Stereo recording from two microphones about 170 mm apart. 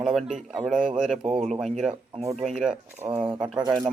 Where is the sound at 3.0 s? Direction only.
20° right (ahead or behind).